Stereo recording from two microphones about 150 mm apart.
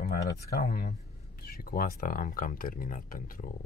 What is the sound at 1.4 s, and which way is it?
Speech, 85° left.